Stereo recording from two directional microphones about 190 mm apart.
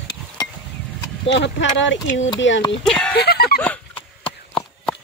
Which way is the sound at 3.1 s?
55° left (ahead or behind).